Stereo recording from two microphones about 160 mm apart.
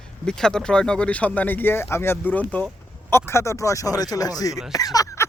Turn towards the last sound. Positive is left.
turn(degrees=20)  # may be behind; listen again after turning